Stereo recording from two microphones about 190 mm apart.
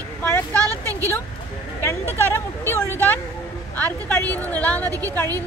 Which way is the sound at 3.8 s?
10° left (ahead or behind).